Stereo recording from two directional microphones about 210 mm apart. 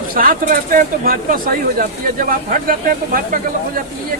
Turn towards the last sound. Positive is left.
turn(degrees=-40)  # may be behind; listen again after turning